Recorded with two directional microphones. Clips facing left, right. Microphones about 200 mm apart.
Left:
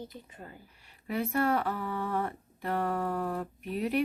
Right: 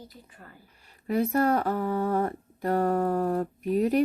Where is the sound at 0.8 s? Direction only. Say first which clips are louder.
Right 7 dB; 40° right (ahead or behind).